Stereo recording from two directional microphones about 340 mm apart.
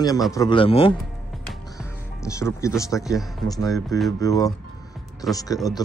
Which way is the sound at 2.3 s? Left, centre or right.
Centre.